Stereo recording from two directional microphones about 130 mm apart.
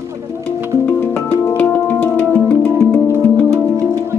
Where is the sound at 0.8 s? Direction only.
10° left (ahead or behind).